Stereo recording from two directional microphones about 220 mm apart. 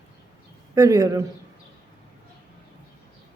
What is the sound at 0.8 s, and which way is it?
Speech, 15° right (ahead or behind).